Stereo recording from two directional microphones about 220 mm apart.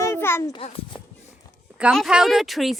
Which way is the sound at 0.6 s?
25° left (ahead or behind).